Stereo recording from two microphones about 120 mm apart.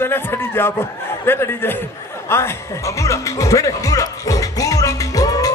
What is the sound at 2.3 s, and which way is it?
Music, 20° left (ahead or behind).